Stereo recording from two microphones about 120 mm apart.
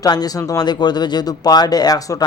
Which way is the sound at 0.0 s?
35° left (ahead or behind).